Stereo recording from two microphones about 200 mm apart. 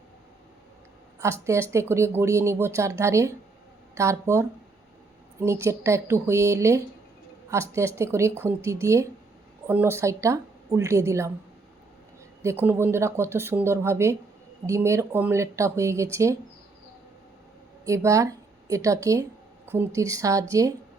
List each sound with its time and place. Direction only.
1.2 s speech: 15° right (ahead or behind)
12.4 s speech: 10° right (ahead or behind)
17.8 s a woman's voice: 15° right (ahead or behind)